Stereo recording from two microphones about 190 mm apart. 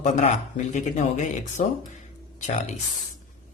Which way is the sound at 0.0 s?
40° left (ahead or behind).